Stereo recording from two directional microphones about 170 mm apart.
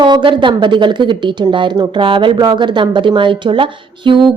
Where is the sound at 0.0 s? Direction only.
25° right (ahead or behind).